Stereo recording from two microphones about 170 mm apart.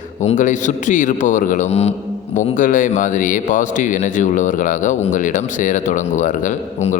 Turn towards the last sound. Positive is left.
turn(degrees=45)  # may be behind; listen again after turning